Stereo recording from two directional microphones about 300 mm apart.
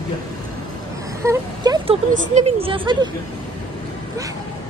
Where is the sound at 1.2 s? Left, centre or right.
Centre.